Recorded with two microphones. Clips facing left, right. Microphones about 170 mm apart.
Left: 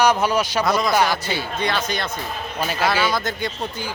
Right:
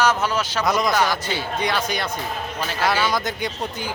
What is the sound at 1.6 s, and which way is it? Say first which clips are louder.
Speech: even; 10° right (ahead or behind).